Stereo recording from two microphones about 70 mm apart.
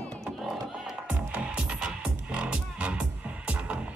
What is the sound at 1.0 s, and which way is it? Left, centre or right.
Music, centre.